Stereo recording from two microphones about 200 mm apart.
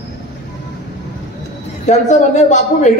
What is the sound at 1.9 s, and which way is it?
A man's voice, 35° left (ahead or behind).